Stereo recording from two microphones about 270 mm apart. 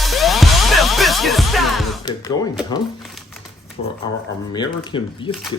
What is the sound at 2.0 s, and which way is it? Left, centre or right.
Speech, centre.